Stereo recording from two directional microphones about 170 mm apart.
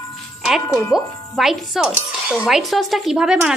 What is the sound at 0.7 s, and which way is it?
Speech, 20° left (ahead or behind).